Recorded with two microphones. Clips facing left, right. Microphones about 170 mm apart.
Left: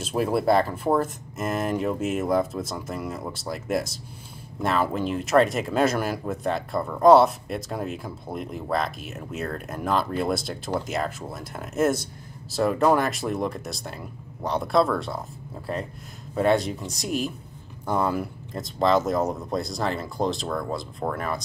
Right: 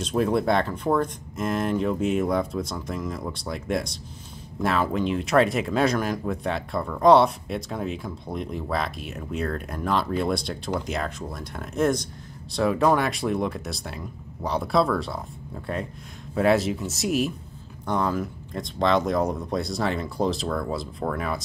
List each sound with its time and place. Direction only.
0.0 s speech: 5° left (ahead or behind)